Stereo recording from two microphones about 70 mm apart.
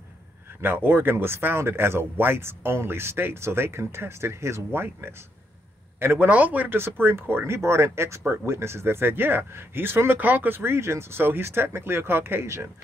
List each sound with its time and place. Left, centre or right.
0.6 s speech: right